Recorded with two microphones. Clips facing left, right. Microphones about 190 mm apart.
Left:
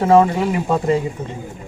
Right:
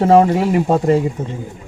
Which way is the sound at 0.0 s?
35° right (ahead or behind).